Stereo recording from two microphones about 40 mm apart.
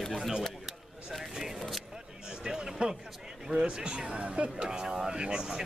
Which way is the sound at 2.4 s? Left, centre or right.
Centre.